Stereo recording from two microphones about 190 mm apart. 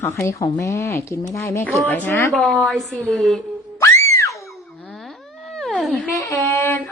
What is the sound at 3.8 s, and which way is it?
Music, 15° left (ahead or behind).